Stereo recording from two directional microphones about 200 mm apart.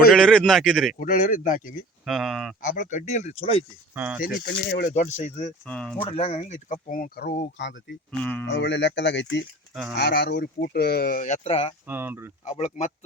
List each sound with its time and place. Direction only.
0.1 s a man's voice: centre (ahead or behind)
0.9 s speech: 40° left (ahead or behind)
2.0 s a man's voice: centre (ahead or behind)
2.6 s speech: 40° left (ahead or behind)
3.9 s speech: 10° right (ahead or behind)
4.4 s speech: 50° left (ahead or behind); by 5.5 s 30° left (ahead or behind)
5.6 s a man's voice: 5° left (ahead or behind)
6.0 s speech: 30° left (ahead or behind); by 7.8 s 60° left (ahead or behind)
8.2 s speech: 5° left (ahead or behind)
8.4 s speech: 60° left (ahead or behind); by 11.7 s 30° left (ahead or behind)
11.9 s speech: 10° right (ahead or behind)
12.5 s speech: 35° left (ahead or behind)